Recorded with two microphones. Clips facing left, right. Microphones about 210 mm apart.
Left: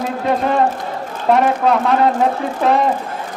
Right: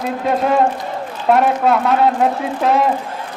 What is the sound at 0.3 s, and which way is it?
A man's voice, 5° right (ahead or behind).